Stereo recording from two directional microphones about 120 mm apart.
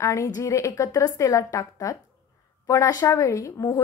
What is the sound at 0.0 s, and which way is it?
A woman's voice, 25° left (ahead or behind).